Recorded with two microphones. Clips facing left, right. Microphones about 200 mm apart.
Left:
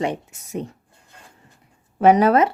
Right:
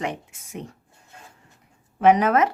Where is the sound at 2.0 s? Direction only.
35° left (ahead or behind).